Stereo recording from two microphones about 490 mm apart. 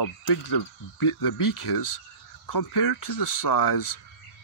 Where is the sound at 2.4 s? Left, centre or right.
Left.